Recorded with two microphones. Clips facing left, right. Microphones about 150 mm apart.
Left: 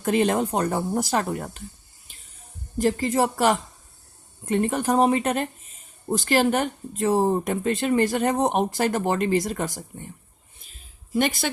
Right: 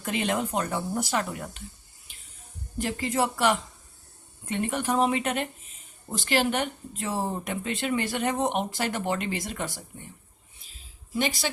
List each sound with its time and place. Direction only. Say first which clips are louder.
0.0 s speech: left 7 dB; 40° left (ahead or behind)
2.7 s speech: left 6 dB; 40° left (ahead or behind)
11.1 s speech: left 5 dB; 50° left (ahead or behind)